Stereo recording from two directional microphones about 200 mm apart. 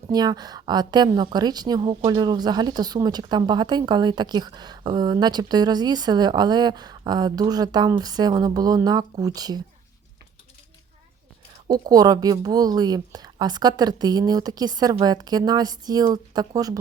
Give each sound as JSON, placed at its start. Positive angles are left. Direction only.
{"t": 0.1, "sound": "speech", "side_deg": -20}
{"t": 11.7, "sound": "speech", "side_deg": -20}